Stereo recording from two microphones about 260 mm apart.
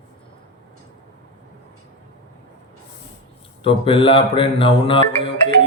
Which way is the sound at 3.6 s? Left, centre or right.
Left.